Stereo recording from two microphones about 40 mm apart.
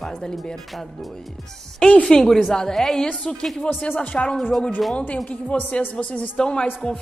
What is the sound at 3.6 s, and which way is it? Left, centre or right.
Speech, left.